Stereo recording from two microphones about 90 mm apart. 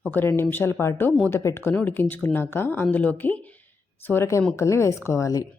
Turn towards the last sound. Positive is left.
turn(degrees=40)  # may be behind; listen again after turning